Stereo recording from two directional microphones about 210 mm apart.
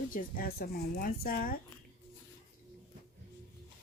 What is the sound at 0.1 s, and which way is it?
A woman's voice, 45° left (ahead or behind).